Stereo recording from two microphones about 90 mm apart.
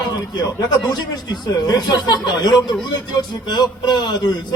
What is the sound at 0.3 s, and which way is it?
A man's voice, 50° left (ahead or behind).